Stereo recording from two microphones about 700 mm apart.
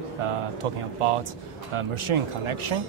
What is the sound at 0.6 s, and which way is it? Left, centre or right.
Speech, right.